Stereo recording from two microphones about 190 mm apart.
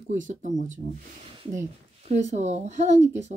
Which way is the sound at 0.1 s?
40° right (ahead or behind).